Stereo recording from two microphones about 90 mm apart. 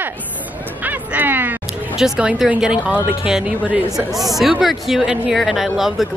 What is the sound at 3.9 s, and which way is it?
Speech, centre (ahead or behind).